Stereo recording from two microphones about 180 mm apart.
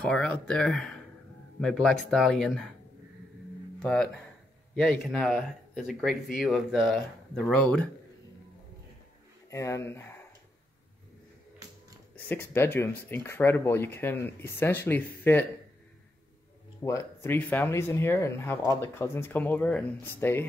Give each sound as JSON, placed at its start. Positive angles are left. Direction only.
{"t": 0.0, "sound": "speech", "side_deg": 5}
{"t": 3.8, "sound": "speech", "side_deg": 5}
{"t": 9.5, "sound": "speech", "side_deg": 15}
{"t": 12.3, "sound": "speech", "side_deg": 10}
{"t": 16.8, "sound": "speech", "side_deg": 15}